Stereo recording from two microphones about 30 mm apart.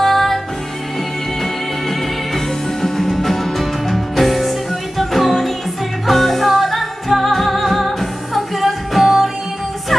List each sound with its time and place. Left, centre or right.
0.0 s music: centre
2.8 s music: centre